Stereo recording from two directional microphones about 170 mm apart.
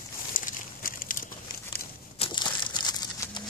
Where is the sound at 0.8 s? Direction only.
55° left (ahead or behind).